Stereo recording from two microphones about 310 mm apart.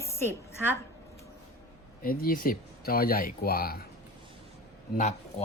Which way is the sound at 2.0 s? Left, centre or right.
Left.